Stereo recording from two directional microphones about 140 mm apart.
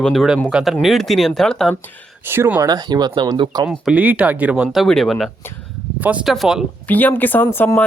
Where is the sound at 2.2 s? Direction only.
15° right (ahead or behind); by 3.7 s 35° right (ahead or behind).